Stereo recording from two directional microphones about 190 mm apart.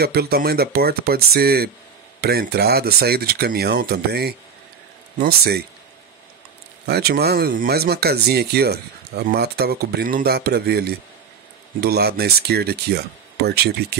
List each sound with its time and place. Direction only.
0.0 s speech: 55° right (ahead or behind)
6.9 s speech: 55° right (ahead or behind)